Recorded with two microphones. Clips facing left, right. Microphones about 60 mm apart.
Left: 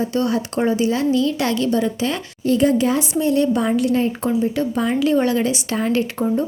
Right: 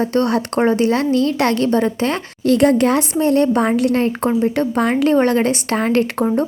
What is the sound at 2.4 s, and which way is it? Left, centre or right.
A woman's voice, right.